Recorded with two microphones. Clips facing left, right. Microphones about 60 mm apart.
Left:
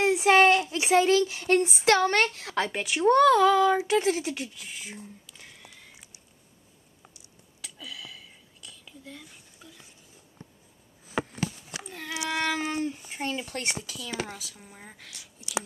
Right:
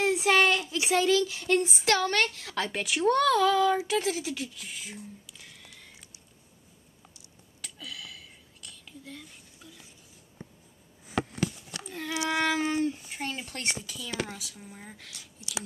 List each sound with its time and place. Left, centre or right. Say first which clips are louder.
0.0 s a sound: left 4 dB; left
1.8 s a woman's voice: left 4 dB; left
2.7 s speech: left 1 dB; centre
3.1 s speech: left 5 dB; centre
3.8 s a woman's voice: left 4 dB; left
4.6 s speech: left 1 dB; centre
5.7 s a sound: even; centre
7.6 s whispering: even; centre
11.2 s a sound: right 1 dB; centre
12.4 s speech: right 1 dB; centre
13.8 s speech: even; centre